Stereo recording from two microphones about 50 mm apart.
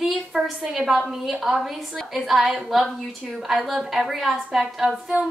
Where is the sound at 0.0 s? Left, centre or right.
Centre.